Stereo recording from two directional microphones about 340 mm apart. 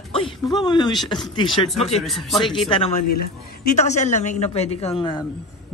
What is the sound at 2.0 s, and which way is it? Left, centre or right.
Speech, centre.